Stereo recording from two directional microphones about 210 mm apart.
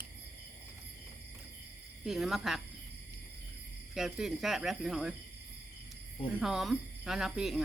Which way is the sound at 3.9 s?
Centre (ahead or behind).